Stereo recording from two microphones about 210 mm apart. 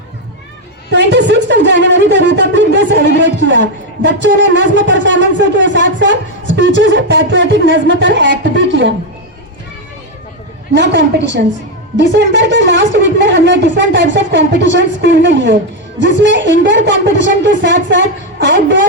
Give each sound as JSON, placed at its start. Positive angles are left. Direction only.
{"t": 0.9, "sound": "speech", "side_deg": -55}
{"t": 10.8, "sound": "speech", "side_deg": -55}